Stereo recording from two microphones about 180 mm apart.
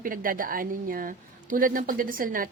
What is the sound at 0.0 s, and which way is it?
A woman's voice, 50° right (ahead or behind).